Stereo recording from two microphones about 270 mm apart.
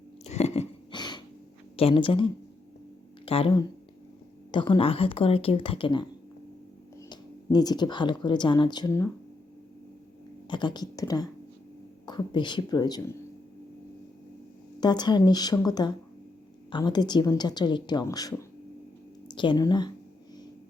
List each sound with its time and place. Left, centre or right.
0.3 s a sound: left
1.7 s speech: left
7.1 s speech: centre
10.5 s a woman's voice: centre
14.8 s a woman's voice: centre